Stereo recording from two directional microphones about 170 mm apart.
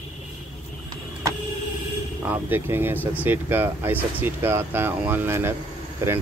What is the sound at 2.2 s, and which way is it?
Speech, 10° right (ahead or behind).